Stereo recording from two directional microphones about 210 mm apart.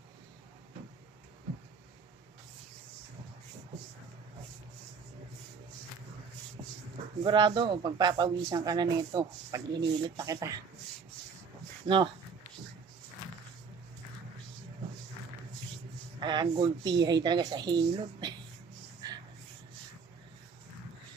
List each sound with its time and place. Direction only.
7.2 s speech: 20° right (ahead or behind)
11.9 s speech: 20° right (ahead or behind)
16.2 s speech: 20° right (ahead or behind)
19.0 s a sound: 20° right (ahead or behind)